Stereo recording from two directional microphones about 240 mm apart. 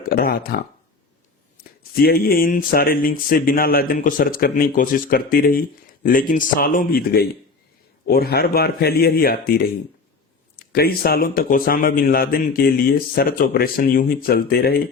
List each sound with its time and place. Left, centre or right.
0.1 s speech: left
10.6 s speech: left